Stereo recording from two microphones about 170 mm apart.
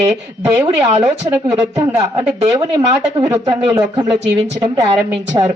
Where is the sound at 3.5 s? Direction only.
25° right (ahead or behind).